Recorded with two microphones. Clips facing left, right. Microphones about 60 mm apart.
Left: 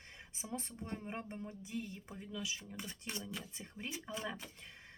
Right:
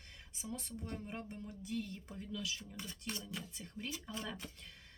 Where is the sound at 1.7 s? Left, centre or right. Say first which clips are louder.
Right 3 dB; centre.